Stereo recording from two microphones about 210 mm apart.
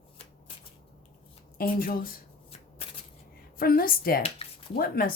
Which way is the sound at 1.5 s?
45° left (ahead or behind).